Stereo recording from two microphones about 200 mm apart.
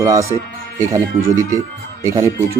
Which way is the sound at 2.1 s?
15° right (ahead or behind).